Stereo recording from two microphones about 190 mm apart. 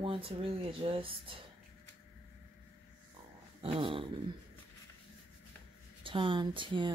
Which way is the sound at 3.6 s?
30° right (ahead or behind).